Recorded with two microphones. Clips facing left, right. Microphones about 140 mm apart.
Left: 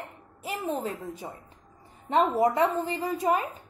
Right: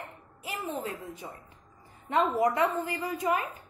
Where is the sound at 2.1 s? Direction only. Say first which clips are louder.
Left 3 dB; 30° left (ahead or behind).